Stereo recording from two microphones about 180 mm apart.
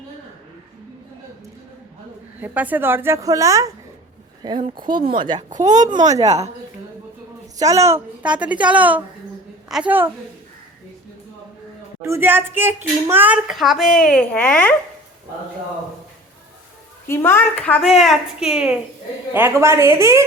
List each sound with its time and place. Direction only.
2.4 s a woman's voice: 10° right (ahead or behind)
7.6 s a woman's voice: 15° right (ahead or behind)
12.0 s speech: 15° right (ahead or behind); by 14.8 s 5° left (ahead or behind)
17.1 s a woman's voice: 15° left (ahead or behind); by 20.2 s 15° right (ahead or behind)